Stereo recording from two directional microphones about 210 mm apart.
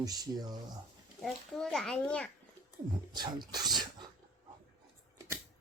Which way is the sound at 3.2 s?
20° right (ahead or behind).